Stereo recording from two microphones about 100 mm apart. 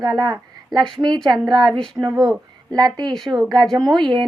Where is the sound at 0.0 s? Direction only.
40° right (ahead or behind).